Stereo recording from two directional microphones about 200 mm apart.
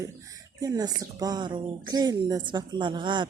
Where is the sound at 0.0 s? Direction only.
15° right (ahead or behind).